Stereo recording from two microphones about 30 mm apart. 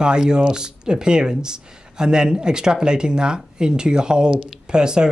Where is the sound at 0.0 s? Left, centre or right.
Right.